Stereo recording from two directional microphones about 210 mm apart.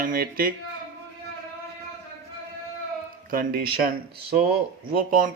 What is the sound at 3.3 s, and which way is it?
Speech, 45° right (ahead or behind).